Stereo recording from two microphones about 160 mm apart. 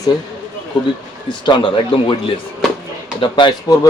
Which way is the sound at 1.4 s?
30° left (ahead or behind).